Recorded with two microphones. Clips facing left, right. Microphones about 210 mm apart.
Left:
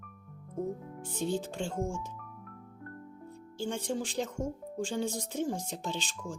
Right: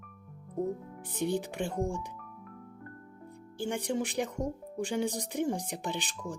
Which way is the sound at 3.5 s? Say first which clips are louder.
Right 2 dB; 15° right (ahead or behind).